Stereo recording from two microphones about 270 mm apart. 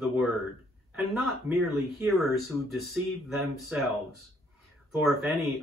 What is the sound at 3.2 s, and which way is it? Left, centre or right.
Speech, centre.